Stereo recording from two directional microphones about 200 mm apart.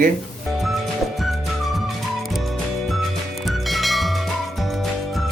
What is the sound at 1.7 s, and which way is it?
Music, centre (ahead or behind).